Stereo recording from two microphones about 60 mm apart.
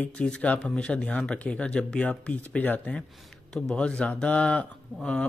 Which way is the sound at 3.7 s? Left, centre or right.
Centre.